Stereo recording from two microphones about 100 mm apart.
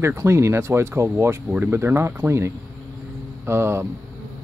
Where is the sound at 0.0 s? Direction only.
25° right (ahead or behind).